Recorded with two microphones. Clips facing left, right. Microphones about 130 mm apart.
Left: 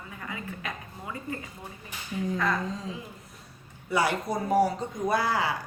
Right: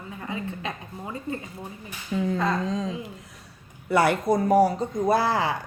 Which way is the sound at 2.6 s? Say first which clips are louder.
Right 7 dB; 80° right.